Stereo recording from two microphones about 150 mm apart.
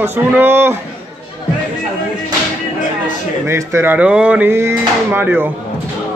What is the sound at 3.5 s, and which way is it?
Speech, 15° right (ahead or behind).